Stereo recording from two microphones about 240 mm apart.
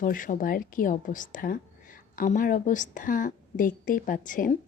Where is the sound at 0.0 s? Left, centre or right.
Left.